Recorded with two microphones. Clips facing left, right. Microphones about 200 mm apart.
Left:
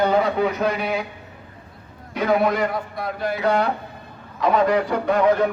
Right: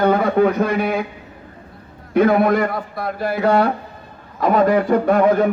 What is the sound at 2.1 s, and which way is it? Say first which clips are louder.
A man's voice: right 5 dB; 50° right (ahead or behind).